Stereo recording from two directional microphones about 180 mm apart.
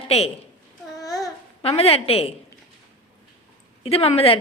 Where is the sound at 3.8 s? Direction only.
35° left (ahead or behind).